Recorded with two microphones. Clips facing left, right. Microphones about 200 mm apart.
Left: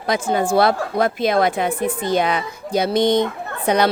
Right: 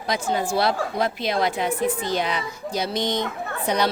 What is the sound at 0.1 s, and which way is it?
A woman's voice, 55° left (ahead or behind).